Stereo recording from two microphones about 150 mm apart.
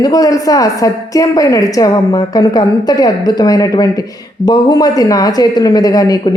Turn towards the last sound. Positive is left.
turn(degrees=25)  # may be behind; listen again after turning